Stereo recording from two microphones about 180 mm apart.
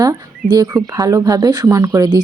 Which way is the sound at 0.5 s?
20° right (ahead or behind).